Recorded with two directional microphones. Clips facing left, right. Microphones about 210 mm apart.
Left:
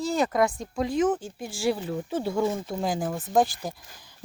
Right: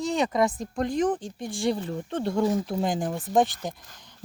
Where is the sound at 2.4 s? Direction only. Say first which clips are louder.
Right 2 dB; 25° left (ahead or behind).